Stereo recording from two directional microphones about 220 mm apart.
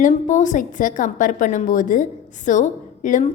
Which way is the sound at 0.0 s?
35° left (ahead or behind).